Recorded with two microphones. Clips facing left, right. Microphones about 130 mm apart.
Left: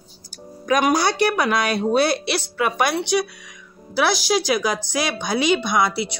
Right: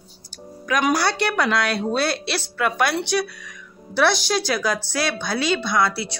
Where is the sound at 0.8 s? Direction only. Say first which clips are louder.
Left 1 dB; 15° left (ahead or behind).